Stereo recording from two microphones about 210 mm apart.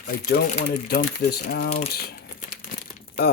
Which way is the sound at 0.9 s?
45° left (ahead or behind).